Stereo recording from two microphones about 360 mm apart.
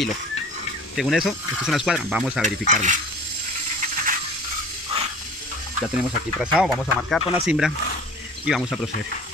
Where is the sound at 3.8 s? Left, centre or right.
Right.